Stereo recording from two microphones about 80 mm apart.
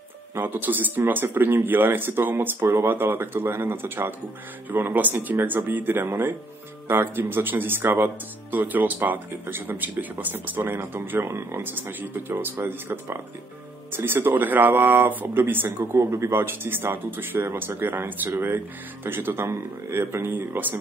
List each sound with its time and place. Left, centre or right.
0.3 s speech: right